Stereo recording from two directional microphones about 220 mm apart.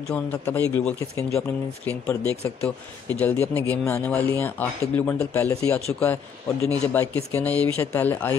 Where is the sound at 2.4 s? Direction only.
5° left (ahead or behind).